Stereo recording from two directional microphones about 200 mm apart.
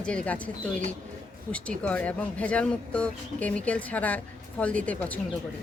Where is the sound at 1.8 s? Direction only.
5° left (ahead or behind).